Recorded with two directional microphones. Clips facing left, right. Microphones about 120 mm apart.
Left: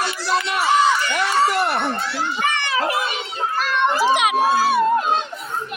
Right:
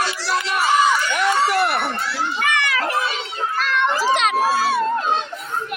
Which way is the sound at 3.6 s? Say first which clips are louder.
Left 2 dB; 15° left (ahead or behind).